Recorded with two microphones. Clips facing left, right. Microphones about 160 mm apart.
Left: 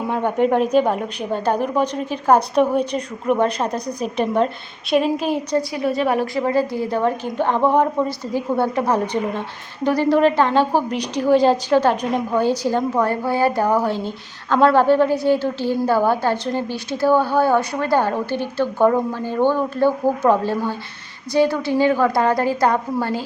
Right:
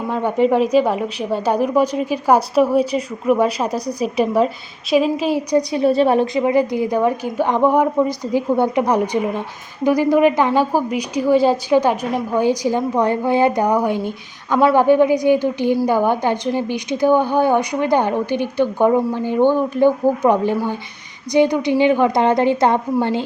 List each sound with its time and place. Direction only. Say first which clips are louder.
0.7 s a woman's voice: right 1 dB; 5° right (ahead or behind)
5.7 s a woman's voice: right 7 dB; 30° right (ahead or behind)